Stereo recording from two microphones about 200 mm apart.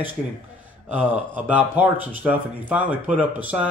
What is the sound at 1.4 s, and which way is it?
Speech, 10° right (ahead or behind).